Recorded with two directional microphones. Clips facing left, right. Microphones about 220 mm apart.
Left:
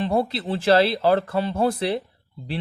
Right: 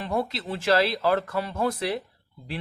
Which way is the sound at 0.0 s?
30° left (ahead or behind).